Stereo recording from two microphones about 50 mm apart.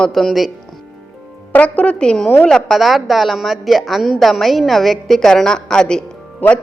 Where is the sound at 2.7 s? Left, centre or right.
Centre.